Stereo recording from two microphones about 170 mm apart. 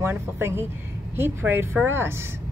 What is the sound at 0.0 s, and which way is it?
Speech, 15° right (ahead or behind).